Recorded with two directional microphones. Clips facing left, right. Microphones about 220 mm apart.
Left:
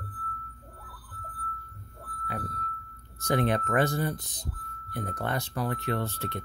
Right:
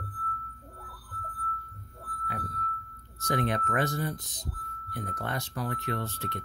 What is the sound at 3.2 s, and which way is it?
Speech, 30° left (ahead or behind).